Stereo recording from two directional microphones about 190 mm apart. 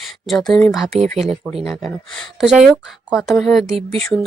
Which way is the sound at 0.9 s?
35° right (ahead or behind).